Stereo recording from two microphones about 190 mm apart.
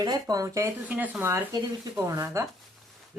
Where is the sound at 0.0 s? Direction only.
20° right (ahead or behind).